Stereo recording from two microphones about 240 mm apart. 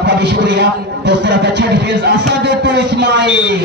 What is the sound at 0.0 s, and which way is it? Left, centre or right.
A man's voice, right.